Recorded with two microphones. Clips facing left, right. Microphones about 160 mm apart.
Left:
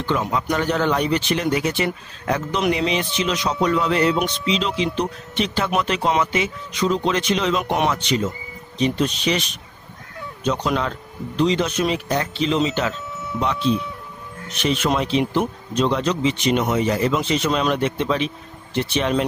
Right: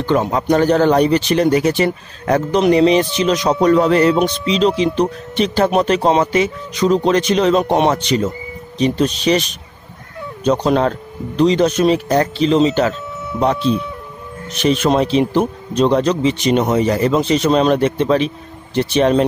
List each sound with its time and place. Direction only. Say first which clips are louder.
0.0 s speech: right 6 dB; 40° right (ahead or behind)
10.4 s speech: right 7 dB; 35° right (ahead or behind)
14.6 s speech: right 6 dB; 40° right (ahead or behind)